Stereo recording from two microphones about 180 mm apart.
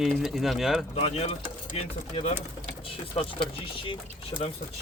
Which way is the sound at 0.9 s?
35° left (ahead or behind).